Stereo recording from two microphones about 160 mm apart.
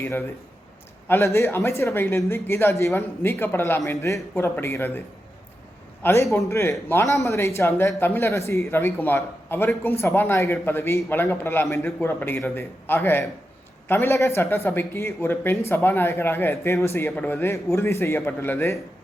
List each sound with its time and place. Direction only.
0.0 s a man's voice: 15° left (ahead or behind)